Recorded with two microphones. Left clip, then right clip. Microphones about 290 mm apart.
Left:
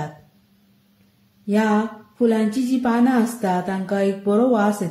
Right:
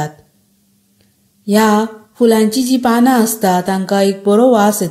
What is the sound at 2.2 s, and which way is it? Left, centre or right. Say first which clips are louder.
A woman's voice: right 8 dB; right.